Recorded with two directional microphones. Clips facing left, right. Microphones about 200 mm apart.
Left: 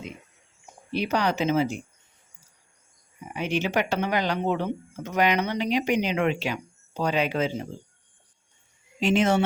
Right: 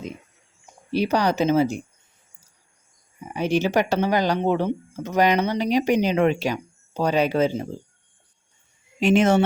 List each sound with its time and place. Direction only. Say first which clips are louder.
0.9 s speech: right 4 dB; 40° right (ahead or behind)
3.3 s speech: right 5 dB; 40° right (ahead or behind)
9.0 s speech: right 4 dB; 50° right (ahead or behind)